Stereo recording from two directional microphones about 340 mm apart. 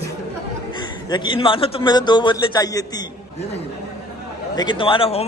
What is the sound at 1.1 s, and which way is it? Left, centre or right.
A man's voice, centre.